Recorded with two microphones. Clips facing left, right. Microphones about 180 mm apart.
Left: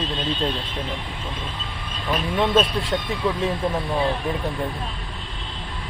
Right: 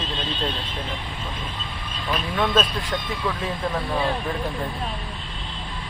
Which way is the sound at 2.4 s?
20° left (ahead or behind).